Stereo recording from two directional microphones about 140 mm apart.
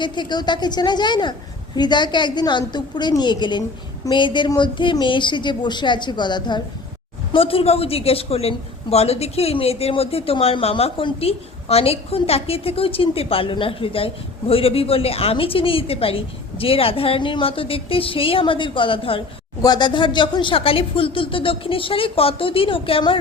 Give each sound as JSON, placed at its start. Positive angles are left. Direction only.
{"t": 0.0, "sound": "a woman's voice", "side_deg": 30}